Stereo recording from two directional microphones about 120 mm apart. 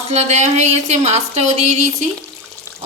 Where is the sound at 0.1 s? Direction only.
70° right (ahead or behind).